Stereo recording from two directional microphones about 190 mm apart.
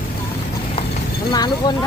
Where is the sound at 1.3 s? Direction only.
20° left (ahead or behind).